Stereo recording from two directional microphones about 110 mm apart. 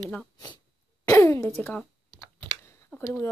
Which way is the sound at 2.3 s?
20° left (ahead or behind).